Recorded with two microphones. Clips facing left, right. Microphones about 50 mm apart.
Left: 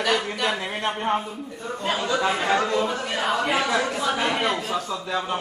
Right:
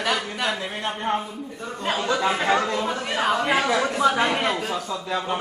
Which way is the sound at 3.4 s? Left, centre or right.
Centre.